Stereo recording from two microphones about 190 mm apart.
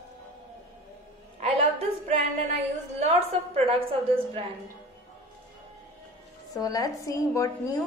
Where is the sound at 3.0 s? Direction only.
35° right (ahead or behind).